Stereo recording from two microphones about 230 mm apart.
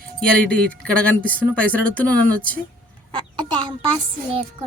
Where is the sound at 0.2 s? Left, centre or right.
Centre.